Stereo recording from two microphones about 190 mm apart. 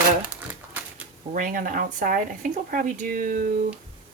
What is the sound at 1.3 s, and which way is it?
Speech, 45° right (ahead or behind).